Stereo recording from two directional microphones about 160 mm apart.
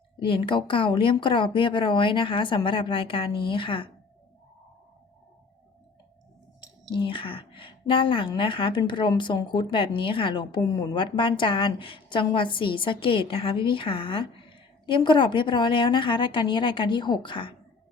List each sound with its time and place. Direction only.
0.2 s a woman's voice: 30° left (ahead or behind)
6.9 s a woman's voice: 30° left (ahead or behind)